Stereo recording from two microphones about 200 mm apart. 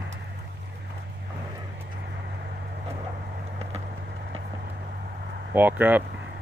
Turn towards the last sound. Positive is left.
turn(degrees=-10)  # may be behind; listen again after turning